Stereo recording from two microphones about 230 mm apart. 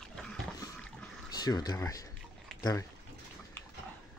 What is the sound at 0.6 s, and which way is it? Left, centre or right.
Water, centre.